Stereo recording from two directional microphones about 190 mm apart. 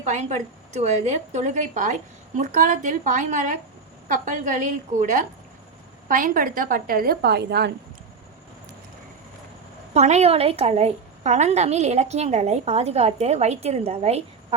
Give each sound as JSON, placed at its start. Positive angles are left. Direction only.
{"t": 0.0, "sound": "a woman's voice", "side_deg": -35}
{"t": 9.9, "sound": "a woman's voice", "side_deg": -35}